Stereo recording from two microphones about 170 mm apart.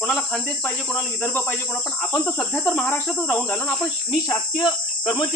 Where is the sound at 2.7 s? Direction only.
10° left (ahead or behind).